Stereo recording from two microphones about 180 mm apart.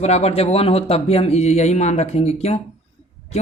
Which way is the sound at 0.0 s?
35° left (ahead or behind).